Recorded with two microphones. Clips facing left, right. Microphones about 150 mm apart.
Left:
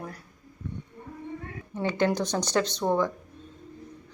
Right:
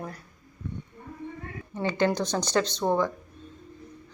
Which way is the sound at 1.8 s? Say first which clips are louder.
Even; 10° left (ahead or behind).